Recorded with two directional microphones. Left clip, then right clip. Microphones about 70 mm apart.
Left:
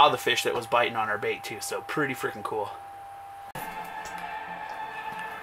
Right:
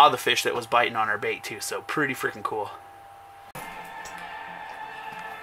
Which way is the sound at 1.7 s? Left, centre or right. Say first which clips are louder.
Right 2 dB; right.